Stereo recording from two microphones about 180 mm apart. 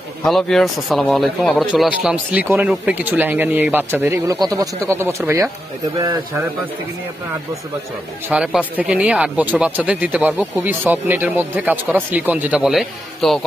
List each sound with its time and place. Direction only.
0.2 s speech: centre (ahead or behind); by 6.7 s 15° right (ahead or behind)
8.3 s speech: 5° right (ahead or behind)